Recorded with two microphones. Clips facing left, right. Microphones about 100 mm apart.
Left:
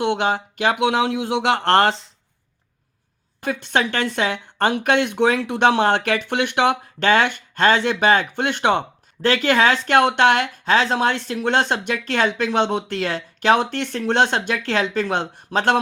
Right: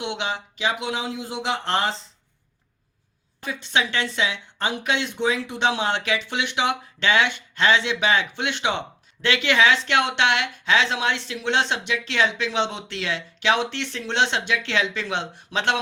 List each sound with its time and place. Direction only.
0.0 s speech: 50° left (ahead or behind)
3.4 s speech: 55° left (ahead or behind)